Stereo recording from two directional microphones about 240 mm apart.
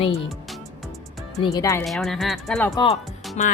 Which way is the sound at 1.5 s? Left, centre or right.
Centre.